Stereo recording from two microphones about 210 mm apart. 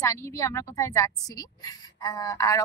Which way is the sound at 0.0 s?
15° left (ahead or behind).